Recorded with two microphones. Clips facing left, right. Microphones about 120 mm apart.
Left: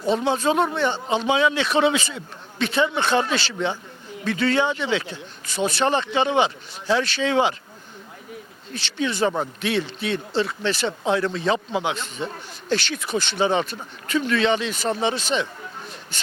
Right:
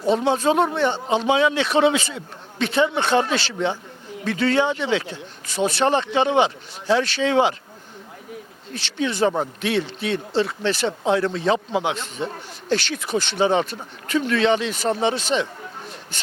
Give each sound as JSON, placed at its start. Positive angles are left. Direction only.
{"t": 0.3, "sound": "speech", "side_deg": -50}
{"t": 0.6, "sound": "speech", "side_deg": -35}
{"t": 1.1, "sound": "speech", "side_deg": -50}
{"t": 8.7, "sound": "speech", "side_deg": -50}
{"t": 12.7, "sound": "speech", "side_deg": -50}
{"t": 14.8, "sound": "speech", "side_deg": -45}